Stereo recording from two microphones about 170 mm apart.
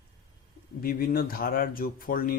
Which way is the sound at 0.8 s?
60° left (ahead or behind).